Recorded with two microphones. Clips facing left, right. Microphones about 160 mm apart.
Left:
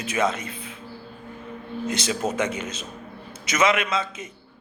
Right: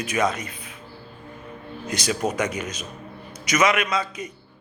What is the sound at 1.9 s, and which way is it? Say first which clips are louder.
Speech: right 1 dB; 25° left (ahead or behind).